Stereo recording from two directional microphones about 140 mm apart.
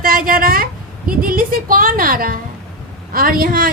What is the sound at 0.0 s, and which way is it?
A woman's voice, 90° right.